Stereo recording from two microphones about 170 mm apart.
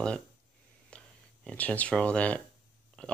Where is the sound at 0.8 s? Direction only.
5° left (ahead or behind).